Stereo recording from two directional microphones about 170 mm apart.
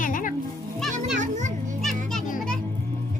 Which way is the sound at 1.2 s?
45° right (ahead or behind).